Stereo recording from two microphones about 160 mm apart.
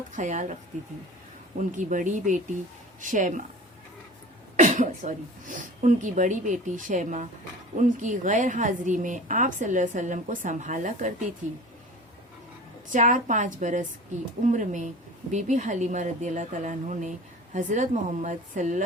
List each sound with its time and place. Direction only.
0.1 s a woman's voice: 50° right (ahead or behind)
1.5 s a woman's voice: 50° right (ahead or behind)
4.5 s a woman's voice: 50° right (ahead or behind)
12.9 s a woman's voice: 50° right (ahead or behind)